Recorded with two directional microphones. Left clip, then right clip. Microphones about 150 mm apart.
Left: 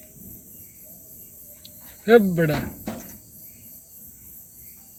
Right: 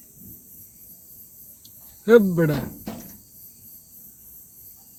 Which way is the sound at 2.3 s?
25° right (ahead or behind).